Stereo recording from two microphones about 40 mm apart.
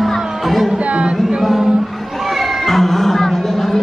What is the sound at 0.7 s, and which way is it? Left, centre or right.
Speech, right.